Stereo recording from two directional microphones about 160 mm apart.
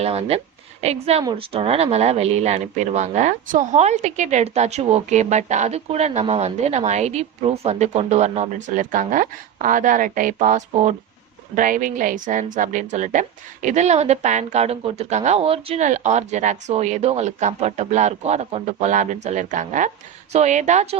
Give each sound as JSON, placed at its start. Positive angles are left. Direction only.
{"t": 0.0, "sound": "speech", "side_deg": -40}